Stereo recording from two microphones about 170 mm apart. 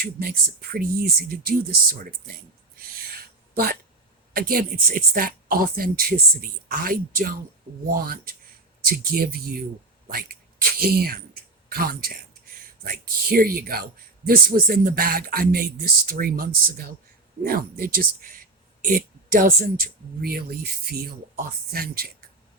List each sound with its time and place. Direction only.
0.0 s speech: 60° right (ahead or behind)
3.5 s speech: 60° right (ahead or behind)
10.1 s a sound: 60° right (ahead or behind)
12.8 s speech: 60° right (ahead or behind)